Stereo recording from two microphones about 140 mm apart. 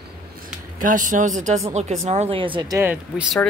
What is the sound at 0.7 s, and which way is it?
Speech, 70° right (ahead or behind).